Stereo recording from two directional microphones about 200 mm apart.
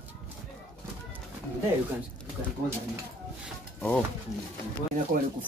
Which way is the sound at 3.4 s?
5° left (ahead or behind).